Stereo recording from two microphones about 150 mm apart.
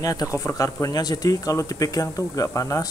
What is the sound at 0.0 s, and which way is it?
Speech, 25° left (ahead or behind).